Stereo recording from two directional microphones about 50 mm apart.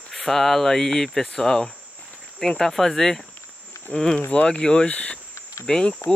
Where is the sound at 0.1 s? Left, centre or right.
Centre.